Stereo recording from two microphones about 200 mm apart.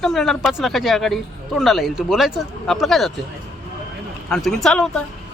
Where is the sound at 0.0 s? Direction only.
Centre (ahead or behind).